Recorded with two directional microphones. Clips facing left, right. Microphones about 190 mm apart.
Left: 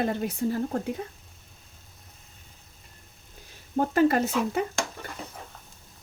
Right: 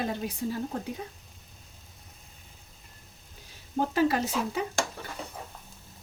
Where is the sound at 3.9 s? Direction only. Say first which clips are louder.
Left 4 dB; 55° left (ahead or behind).